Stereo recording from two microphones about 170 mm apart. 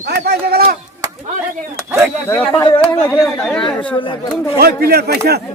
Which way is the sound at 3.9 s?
30° left (ahead or behind).